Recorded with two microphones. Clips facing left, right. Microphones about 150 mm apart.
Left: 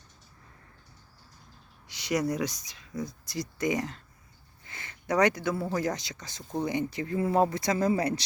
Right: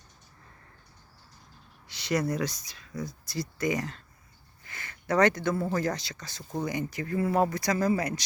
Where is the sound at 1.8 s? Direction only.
15° left (ahead or behind).